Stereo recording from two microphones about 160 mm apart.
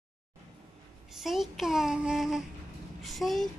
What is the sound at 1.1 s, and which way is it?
Female singing, centre (ahead or behind).